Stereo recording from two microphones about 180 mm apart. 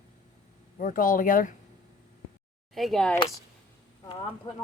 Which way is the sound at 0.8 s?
50° left (ahead or behind).